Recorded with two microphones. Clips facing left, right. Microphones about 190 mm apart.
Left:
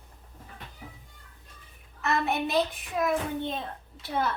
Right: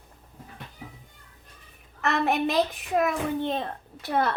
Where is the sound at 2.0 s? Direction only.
70° right (ahead or behind).